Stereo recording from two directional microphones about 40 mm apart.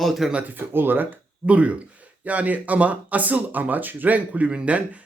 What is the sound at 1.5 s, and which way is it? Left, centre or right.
Speech, right.